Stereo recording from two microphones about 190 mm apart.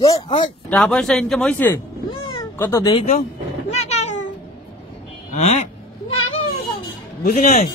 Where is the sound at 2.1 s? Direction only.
25° left (ahead or behind).